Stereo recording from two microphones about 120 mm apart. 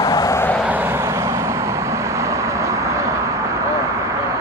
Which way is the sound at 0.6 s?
15° right (ahead or behind).